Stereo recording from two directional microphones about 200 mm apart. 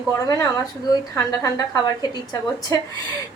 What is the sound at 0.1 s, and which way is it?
A woman's voice, 15° left (ahead or behind).